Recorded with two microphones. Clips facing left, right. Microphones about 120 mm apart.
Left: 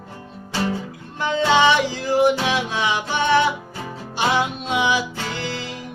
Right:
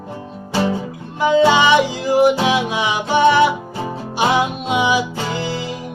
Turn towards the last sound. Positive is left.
turn(degrees=-15)  # may be behind; listen again after turning